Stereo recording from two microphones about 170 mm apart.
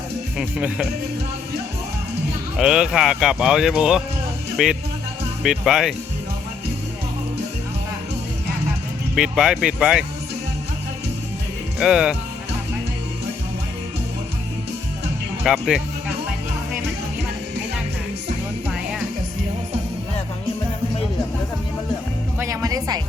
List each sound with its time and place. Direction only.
0.3 s speech: 5° right (ahead or behind)
2.6 s speech: 5° right (ahead or behind)
9.1 s speech: 5° right (ahead or behind)
11.8 s speech: 5° right (ahead or behind)
15.4 s speech: centre (ahead or behind)
18.7 s music: 5° right (ahead or behind)
22.4 s music: 20° right (ahead or behind)